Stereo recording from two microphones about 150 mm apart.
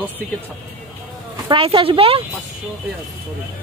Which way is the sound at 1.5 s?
35° right (ahead or behind).